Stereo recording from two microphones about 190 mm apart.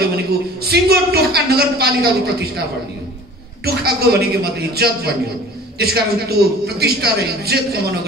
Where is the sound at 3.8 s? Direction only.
55° right (ahead or behind).